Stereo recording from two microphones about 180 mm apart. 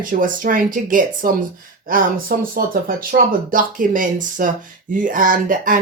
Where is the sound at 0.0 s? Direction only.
50° right (ahead or behind).